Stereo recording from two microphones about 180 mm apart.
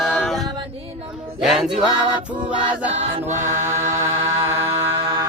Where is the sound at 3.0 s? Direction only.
30° right (ahead or behind).